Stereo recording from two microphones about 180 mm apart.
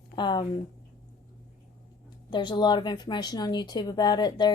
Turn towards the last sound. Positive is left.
turn(degrees=25)  # may be behind; listen again after turning